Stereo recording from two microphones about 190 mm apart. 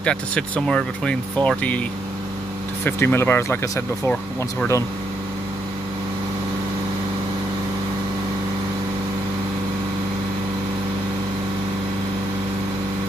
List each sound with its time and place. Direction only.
0.0 s speech: 5° left (ahead or behind)
2.8 s speech: 10° left (ahead or behind)